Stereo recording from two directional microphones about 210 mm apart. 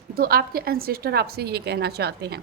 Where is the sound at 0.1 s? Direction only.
45° right (ahead or behind).